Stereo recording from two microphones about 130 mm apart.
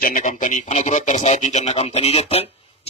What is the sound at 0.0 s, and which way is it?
Speech, 80° left.